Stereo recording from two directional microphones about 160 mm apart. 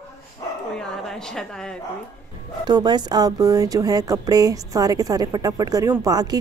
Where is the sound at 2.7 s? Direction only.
25° right (ahead or behind).